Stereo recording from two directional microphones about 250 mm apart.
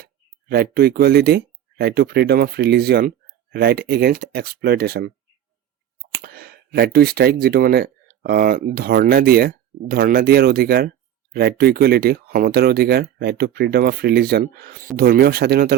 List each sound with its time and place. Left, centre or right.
0.0 s speech: right